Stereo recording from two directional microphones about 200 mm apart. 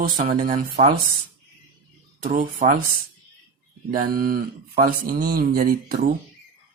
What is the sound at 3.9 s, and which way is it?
Speech, 45° right (ahead or behind).